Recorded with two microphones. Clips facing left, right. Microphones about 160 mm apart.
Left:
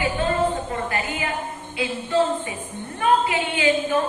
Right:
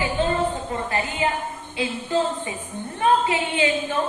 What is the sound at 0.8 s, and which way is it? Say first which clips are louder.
Speech: right 2 dB; 30° right (ahead or behind).